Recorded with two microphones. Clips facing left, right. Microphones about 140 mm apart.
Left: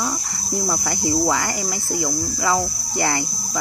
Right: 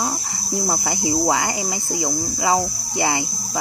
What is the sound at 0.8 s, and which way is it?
Speech, 15° right (ahead or behind).